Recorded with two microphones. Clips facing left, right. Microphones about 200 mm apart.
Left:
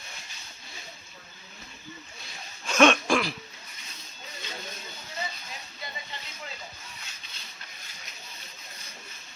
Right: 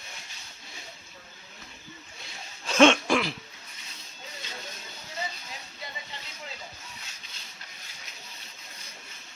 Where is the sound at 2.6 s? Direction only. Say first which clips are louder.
Right 1 dB; 30° right (ahead or behind).